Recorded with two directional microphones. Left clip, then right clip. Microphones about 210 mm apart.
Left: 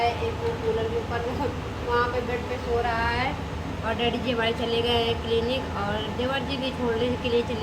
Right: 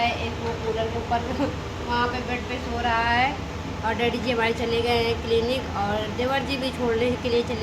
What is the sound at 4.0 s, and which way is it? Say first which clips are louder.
A woman's voice: right 1 dB; 5° right (ahead or behind).